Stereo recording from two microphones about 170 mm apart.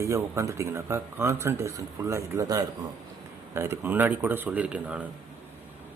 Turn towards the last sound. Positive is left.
turn(degrees=-5)  # may be behind; listen again after turning